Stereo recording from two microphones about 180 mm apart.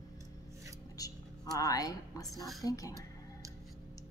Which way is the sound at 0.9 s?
20° left (ahead or behind).